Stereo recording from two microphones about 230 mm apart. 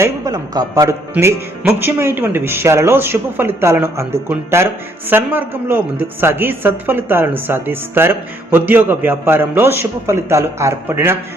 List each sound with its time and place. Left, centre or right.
0.0 s speech: centre